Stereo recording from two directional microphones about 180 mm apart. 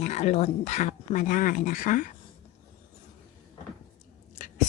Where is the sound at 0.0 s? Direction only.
40° left (ahead or behind).